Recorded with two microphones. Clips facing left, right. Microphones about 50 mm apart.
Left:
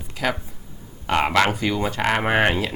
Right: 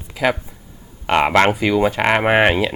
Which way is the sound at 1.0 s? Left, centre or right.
Right.